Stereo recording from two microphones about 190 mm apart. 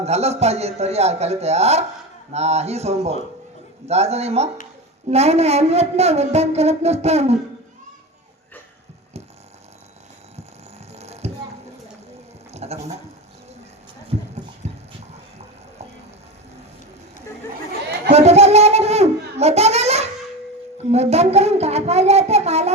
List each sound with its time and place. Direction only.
0.0 s a woman's voice: 35° right (ahead or behind)
10.9 s music: 35° right (ahead or behind)
12.5 s a sound: 35° right (ahead or behind)
14.1 s clip-clop: 30° right (ahead or behind)
14.6 s dog: 35° right (ahead or behind)
18.1 s a sound: 35° right (ahead or behind)
20.9 s a woman's voice: 35° right (ahead or behind)